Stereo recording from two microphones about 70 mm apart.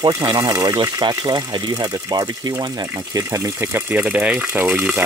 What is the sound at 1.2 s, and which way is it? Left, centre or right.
Speech, right.